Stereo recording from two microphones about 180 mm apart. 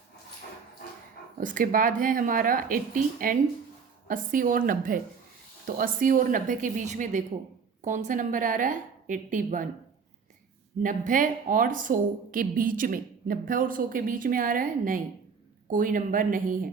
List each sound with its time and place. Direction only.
1.4 s a woman's voice: 45° right (ahead or behind)
10.8 s a woman's voice: 45° right (ahead or behind)